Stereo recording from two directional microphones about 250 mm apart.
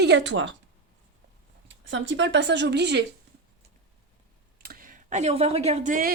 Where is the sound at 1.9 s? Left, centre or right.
Right.